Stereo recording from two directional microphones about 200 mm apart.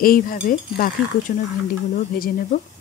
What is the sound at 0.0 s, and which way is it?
Speech, 45° left (ahead or behind).